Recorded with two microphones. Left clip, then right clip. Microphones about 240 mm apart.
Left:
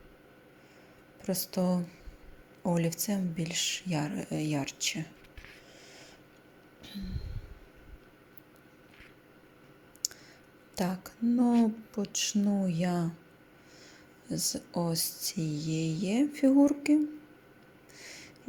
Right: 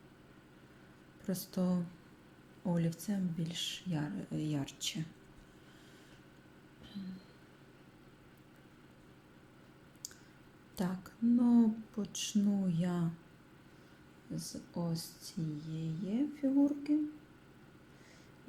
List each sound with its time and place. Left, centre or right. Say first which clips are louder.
1.2 s speech: left 7 dB; centre
6.8 s a sound: left 6 dB; centre
10.0 s clicking: left 13 dB; left
10.8 s speech: left 6 dB; left
14.3 s speech: left 11 dB; left